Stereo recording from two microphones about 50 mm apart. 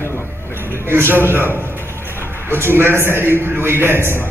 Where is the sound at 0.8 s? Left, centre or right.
Right.